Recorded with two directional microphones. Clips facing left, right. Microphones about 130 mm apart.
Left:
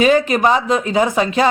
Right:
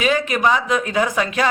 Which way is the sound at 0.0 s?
35° left (ahead or behind).